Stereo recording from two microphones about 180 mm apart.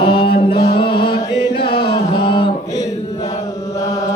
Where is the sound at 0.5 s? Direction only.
65° left (ahead or behind).